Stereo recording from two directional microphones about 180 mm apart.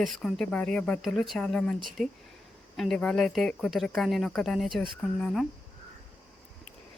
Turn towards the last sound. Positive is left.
turn(degrees=0)  # may be behind; listen again after turning